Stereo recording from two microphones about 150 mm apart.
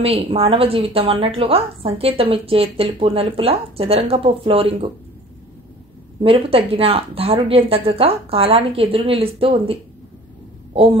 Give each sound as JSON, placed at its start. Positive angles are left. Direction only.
{"t": 0.0, "sound": "a woman's voice", "side_deg": -40}
{"t": 6.2, "sound": "a woman's voice", "side_deg": -40}
{"t": 10.7, "sound": "a sound", "side_deg": -40}